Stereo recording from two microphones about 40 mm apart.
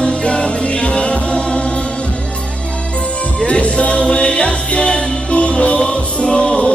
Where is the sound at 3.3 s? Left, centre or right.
Left.